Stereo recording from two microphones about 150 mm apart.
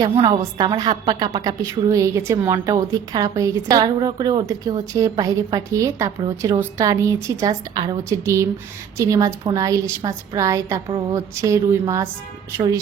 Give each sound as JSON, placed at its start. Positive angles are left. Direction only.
{"t": 0.2, "sound": "a woman's voice", "side_deg": -35}